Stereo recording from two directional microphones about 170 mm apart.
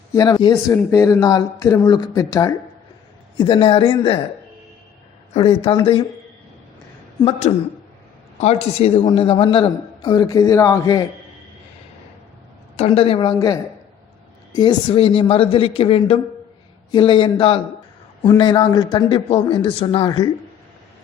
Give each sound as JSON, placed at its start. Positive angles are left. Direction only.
{"t": 0.1, "sound": "speech", "side_deg": 20}
{"t": 3.3, "sound": "speech", "side_deg": 30}
{"t": 5.3, "sound": "a man's voice", "side_deg": 30}
{"t": 7.3, "sound": "a man's voice", "side_deg": 40}
{"t": 12.7, "sound": "a man's voice", "side_deg": 35}